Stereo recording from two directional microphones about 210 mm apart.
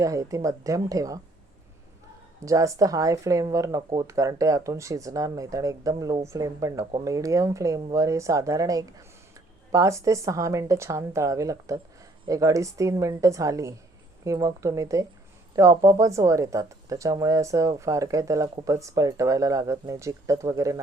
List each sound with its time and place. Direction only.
0.0 s speech: 15° right (ahead or behind)
2.4 s speech: 15° right (ahead or behind)